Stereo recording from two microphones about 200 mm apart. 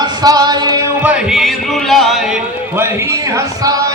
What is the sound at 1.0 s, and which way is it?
A man's voice, 5° right (ahead or behind).